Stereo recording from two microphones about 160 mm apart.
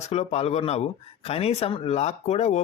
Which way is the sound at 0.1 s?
40° left (ahead or behind).